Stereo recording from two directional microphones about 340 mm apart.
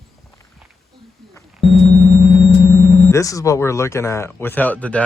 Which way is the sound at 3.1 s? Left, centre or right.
Centre.